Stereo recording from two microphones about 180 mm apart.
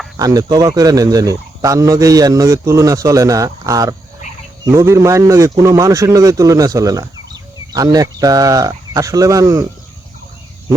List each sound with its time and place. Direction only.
0.2 s a man's voice: 20° right (ahead or behind)